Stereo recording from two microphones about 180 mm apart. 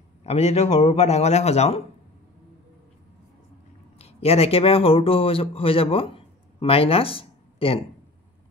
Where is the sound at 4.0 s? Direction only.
35° left (ahead or behind).